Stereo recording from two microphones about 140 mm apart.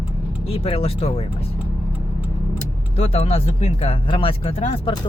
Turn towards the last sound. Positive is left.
turn(degrees=50)  # may be behind; listen again after turning